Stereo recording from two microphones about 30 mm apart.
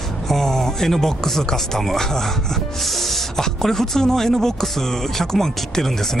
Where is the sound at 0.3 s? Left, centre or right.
Centre.